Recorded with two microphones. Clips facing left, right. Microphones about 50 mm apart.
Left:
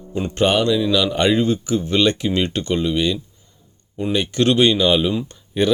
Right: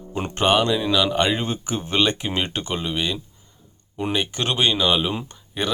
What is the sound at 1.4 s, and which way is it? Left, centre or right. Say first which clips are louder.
Speech: left 7 dB; right.